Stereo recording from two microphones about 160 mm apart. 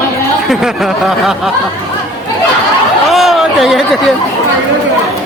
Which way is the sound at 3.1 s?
Centre (ahead or behind).